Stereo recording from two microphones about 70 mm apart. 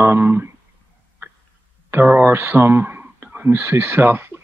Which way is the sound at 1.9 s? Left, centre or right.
Right.